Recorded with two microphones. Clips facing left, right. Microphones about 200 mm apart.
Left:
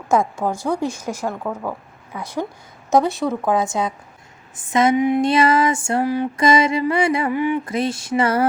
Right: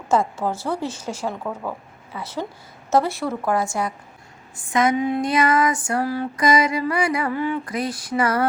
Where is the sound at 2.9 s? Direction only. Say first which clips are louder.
Left 3 dB; 20° left (ahead or behind).